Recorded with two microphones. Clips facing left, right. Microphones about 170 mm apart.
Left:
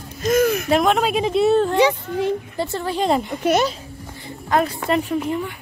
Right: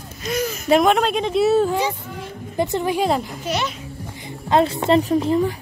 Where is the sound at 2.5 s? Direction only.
15° right (ahead or behind).